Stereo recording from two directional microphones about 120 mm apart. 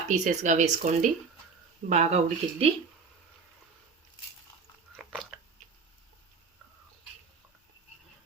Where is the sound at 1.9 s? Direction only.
70° right (ahead or behind).